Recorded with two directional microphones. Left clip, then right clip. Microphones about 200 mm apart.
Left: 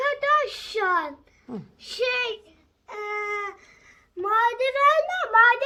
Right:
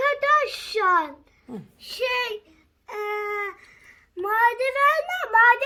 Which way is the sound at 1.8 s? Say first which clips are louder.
Even; 35° right (ahead or behind).